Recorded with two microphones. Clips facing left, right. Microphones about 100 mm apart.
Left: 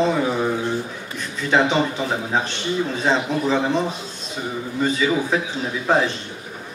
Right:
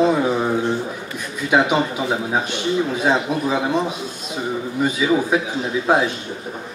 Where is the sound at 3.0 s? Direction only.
10° right (ahead or behind).